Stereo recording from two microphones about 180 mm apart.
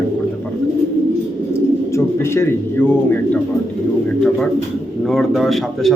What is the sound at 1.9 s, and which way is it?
A man's voice, 15° left (ahead or behind).